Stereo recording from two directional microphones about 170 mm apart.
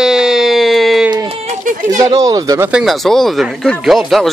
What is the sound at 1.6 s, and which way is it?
Speech, 50° right (ahead or behind).